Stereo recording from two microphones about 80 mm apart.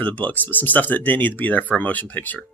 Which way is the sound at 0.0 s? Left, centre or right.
Centre.